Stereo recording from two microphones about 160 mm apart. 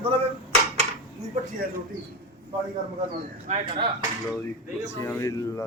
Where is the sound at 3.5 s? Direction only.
45° right (ahead or behind).